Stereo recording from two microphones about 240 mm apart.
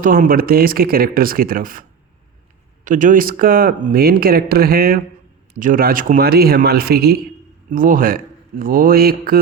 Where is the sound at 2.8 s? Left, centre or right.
Right.